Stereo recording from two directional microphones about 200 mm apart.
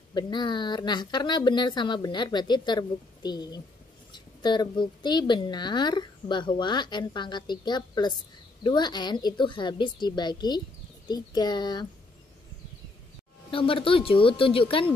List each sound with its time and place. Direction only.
0.1 s a woman's voice: 20° left (ahead or behind)
13.5 s a woman's voice: 25° left (ahead or behind)